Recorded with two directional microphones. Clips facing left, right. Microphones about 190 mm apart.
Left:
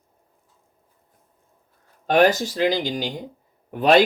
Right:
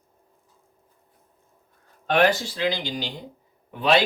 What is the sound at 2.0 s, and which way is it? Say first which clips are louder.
Speech: left 3 dB; 45° left (ahead or behind).